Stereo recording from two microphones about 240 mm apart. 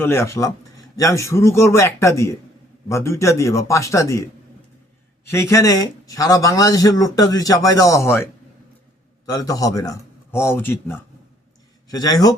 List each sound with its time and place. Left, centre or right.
0.0 s speech: centre
5.3 s speech: centre